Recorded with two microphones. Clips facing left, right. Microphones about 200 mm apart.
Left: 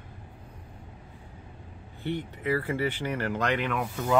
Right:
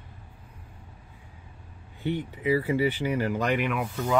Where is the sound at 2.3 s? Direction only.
10° right (ahead or behind).